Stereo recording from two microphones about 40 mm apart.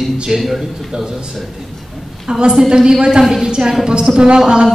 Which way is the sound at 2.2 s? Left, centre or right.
Centre.